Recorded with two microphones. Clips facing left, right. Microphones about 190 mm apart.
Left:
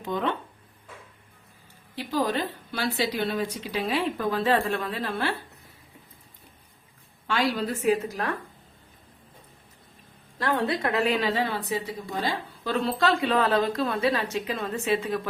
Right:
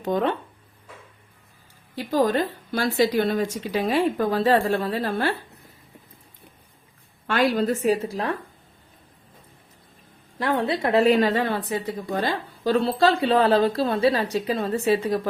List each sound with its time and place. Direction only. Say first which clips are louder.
0.0 s a woman's voice: right 5 dB; 45° right (ahead or behind)
2.0 s a woman's voice: right 5 dB; 45° right (ahead or behind)
7.3 s a woman's voice: right 5 dB; 50° right (ahead or behind)
8.0 s a woman's voice: right 3 dB; 30° right (ahead or behind)
10.3 s a woman's voice: right 2 dB; 20° right (ahead or behind)
11.1 s a woman's voice: right 6 dB; 50° right (ahead or behind)
12.6 s a woman's voice: right 5 dB; 35° right (ahead or behind)